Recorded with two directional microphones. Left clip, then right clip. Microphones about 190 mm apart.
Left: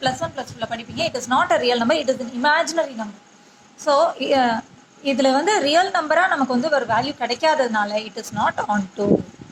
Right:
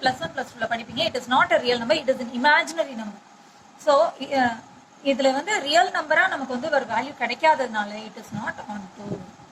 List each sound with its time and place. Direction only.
0.0 s a woman's voice: 10° left (ahead or behind)
3.8 s a woman's voice: 15° left (ahead or behind)